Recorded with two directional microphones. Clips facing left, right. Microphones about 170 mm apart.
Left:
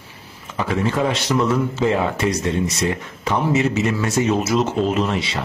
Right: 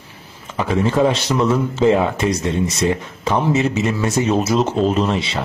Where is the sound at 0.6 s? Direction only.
25° right (ahead or behind).